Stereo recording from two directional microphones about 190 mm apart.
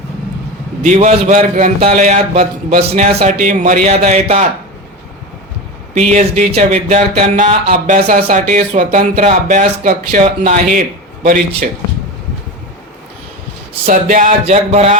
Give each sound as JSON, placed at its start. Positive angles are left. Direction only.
{"t": 0.8, "sound": "speech", "side_deg": -40}
{"t": 5.9, "sound": "speech", "side_deg": -40}
{"t": 13.8, "sound": "speech", "side_deg": -45}